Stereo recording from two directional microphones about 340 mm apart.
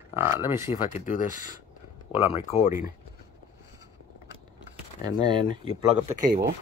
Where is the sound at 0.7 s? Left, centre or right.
Centre.